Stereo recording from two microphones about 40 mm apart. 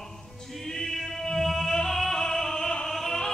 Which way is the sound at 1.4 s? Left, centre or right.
Centre.